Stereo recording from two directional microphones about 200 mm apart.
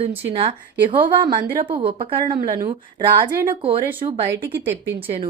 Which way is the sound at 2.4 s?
45° right (ahead or behind).